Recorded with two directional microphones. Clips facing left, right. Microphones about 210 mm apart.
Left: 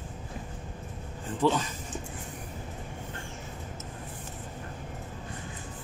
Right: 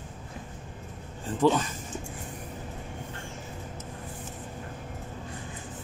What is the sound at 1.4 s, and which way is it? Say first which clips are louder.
Speech: right 3 dB; 50° right (ahead or behind).